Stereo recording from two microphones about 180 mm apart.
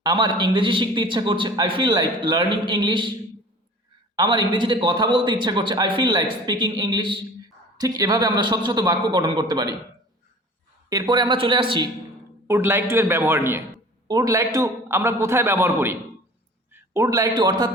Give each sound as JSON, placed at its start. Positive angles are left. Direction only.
{"t": 0.0, "sound": "a man's voice", "side_deg": -25}
{"t": 4.1, "sound": "a man's voice", "side_deg": -25}
{"t": 10.8, "sound": "a man's voice", "side_deg": -20}
{"t": 12.5, "sound": "a man's voice", "side_deg": -15}